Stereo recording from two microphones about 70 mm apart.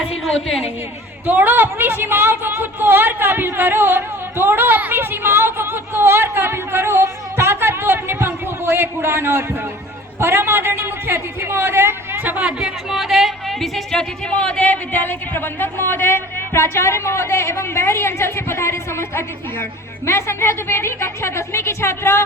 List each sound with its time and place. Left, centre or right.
0.0 s a woman's voice: centre
1.2 s a woman's voice: right; by 22.2 s left